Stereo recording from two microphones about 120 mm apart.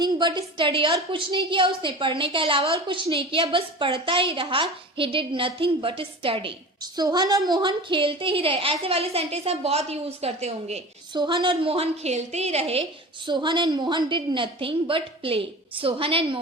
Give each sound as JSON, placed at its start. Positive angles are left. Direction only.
{"t": 0.0, "sound": "a woman's voice", "side_deg": -40}
{"t": 6.9, "sound": "a woman's voice", "side_deg": -35}
{"t": 11.1, "sound": "a woman's voice", "side_deg": -40}
{"t": 13.2, "sound": "a woman's voice", "side_deg": -40}